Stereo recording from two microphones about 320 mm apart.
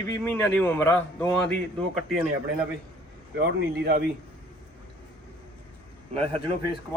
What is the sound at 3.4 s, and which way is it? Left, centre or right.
Speech, right.